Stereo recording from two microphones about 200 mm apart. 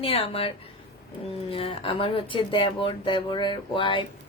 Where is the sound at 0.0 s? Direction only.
30° left (ahead or behind).